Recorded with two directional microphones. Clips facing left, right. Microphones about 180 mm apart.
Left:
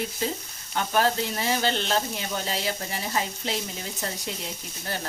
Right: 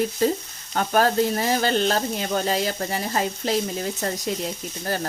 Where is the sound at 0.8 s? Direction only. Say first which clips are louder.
Right 4 dB; 45° right (ahead or behind).